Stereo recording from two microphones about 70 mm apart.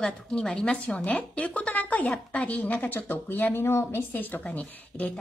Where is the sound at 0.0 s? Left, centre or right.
Centre.